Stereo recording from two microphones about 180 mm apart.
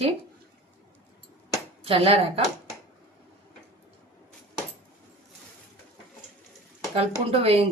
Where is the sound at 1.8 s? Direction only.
30° right (ahead or behind).